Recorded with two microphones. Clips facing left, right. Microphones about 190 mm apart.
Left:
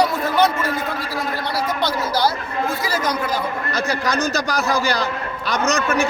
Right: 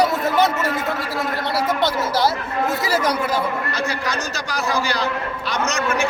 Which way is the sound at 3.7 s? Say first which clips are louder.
Left 3 dB; 40° left (ahead or behind).